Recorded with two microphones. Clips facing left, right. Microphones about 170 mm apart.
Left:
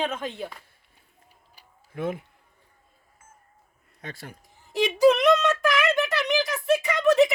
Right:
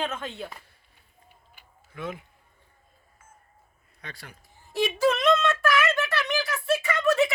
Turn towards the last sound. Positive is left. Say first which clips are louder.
# left 4 dB
turn(degrees=15)  # may be behind; listen again after turning